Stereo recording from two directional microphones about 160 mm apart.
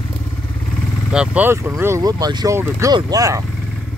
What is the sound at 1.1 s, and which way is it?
Speech, 5° right (ahead or behind).